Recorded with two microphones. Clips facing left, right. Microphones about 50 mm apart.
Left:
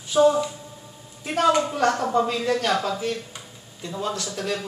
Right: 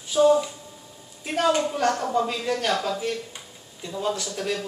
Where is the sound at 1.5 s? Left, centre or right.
Centre.